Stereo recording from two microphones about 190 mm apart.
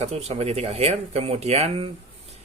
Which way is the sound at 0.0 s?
35° right (ahead or behind).